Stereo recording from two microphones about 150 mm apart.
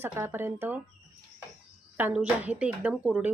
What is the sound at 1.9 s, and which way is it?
Speech, 10° right (ahead or behind).